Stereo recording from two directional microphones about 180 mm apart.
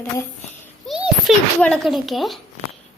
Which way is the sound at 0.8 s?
Centre (ahead or behind).